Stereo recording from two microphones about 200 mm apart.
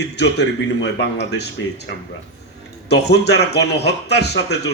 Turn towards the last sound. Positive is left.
turn(degrees=55)  # may be behind; listen again after turning